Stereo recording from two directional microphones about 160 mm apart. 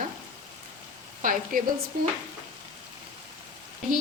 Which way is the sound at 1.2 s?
60° right (ahead or behind).